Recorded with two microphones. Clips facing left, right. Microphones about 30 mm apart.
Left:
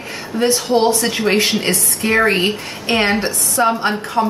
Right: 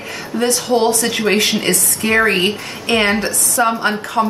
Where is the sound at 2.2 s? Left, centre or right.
Centre.